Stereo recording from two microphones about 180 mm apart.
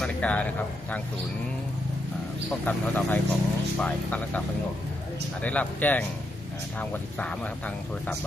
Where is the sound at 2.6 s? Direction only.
10° left (ahead or behind).